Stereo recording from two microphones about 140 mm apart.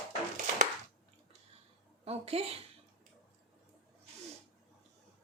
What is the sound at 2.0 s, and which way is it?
Speech, 45° right (ahead or behind).